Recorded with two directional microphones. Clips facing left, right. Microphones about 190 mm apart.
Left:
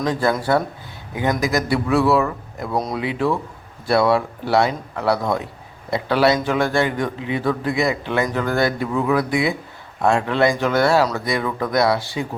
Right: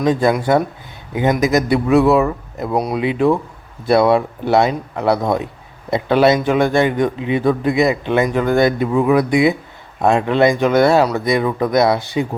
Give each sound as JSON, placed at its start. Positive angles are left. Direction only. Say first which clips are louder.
{"t": 0.0, "sound": "a man's voice", "louder": "right 5 dB", "side_deg": -20}